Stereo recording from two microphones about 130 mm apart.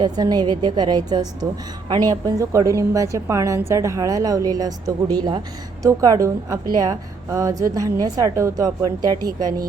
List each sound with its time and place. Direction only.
0.0 s a woman's voice: 30° right (ahead or behind)